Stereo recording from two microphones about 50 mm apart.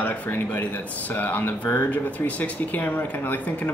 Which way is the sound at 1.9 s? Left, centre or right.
Left.